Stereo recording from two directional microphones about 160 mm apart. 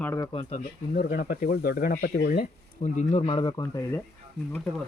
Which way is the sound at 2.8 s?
45° left (ahead or behind).